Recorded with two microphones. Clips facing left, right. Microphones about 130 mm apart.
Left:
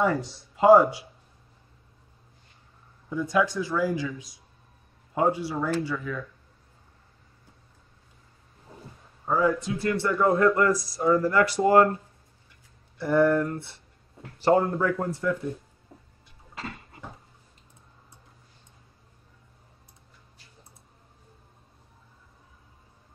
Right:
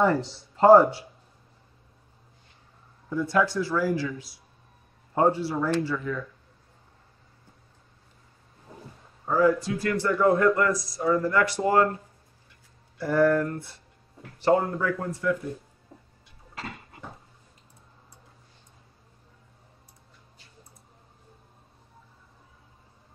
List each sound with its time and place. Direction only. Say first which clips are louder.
0.0 s speech: right 2 dB; 10° left (ahead or behind)
3.1 s speech: even; 15° left (ahead or behind)
9.3 s speech: right 2 dB; 20° left (ahead or behind)
13.0 s speech: even; 25° left (ahead or behind)
14.4 s speech: left 1 dB; 35° left (ahead or behind)